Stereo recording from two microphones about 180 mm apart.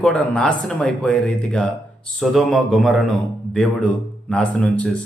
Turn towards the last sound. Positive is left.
turn(degrees=5)  # may be behind; listen again after turning